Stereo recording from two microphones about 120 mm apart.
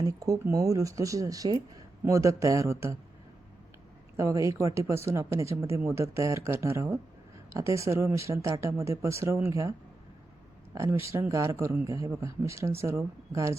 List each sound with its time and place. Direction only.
0.0 s speech: 30° right (ahead or behind)
4.2 s speech: 25° right (ahead or behind)
10.8 s speech: 25° right (ahead or behind)